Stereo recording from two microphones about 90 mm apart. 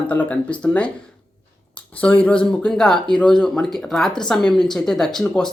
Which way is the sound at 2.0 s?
15° left (ahead or behind).